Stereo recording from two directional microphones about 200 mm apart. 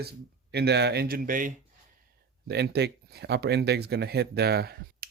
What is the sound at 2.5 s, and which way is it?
Speech, 55° right (ahead or behind).